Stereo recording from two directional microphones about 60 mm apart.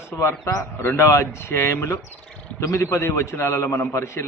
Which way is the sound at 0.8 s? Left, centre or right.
Left.